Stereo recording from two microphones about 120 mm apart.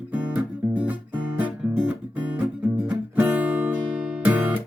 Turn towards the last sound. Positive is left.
turn(degrees=-15)  # may be behind; listen again after turning